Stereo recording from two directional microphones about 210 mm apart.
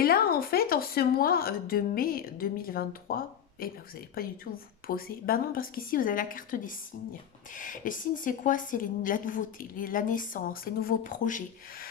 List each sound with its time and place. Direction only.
0.0 s a woman's voice: 45° left (ahead or behind)